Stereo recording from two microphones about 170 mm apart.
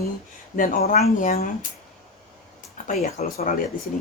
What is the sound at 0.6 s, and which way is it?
Speech, 55° left (ahead or behind).